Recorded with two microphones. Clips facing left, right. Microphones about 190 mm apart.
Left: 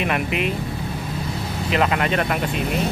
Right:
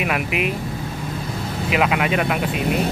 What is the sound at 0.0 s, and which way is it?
Speech, 5° right (ahead or behind).